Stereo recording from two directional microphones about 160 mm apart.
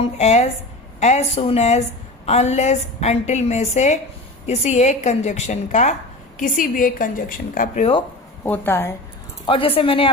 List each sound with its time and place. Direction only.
0.0 s a woman's voice: 45° left (ahead or behind)
6.4 s a woman's voice: 60° left (ahead or behind)
8.4 s a woman's voice: 10° left (ahead or behind)
9.5 s speech: 35° left (ahead or behind)